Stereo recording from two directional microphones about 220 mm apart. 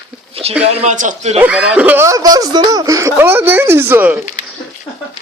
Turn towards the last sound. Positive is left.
turn(degrees=-10)  # may be behind; listen again after turning